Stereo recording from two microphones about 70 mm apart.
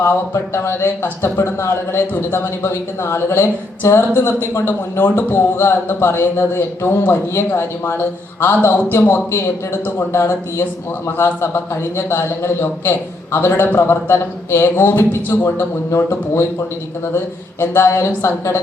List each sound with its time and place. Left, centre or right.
0.3 s speech: left